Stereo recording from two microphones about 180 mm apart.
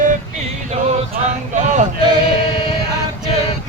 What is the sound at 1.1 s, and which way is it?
Speech, 45° right (ahead or behind).